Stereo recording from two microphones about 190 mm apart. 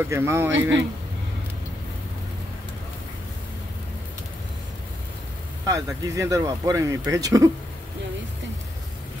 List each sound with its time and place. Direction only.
0.0 s speech: 15° right (ahead or behind)
0.5 s speech: 75° right (ahead or behind)
5.7 s speech: 15° right (ahead or behind)